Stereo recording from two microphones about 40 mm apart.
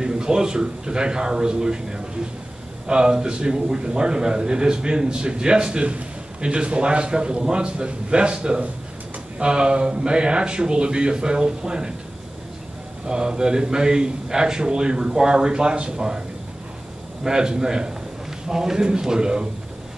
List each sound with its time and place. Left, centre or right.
0.0 s a man's voice: centre
13.0 s a man's voice: centre
17.2 s a man's voice: centre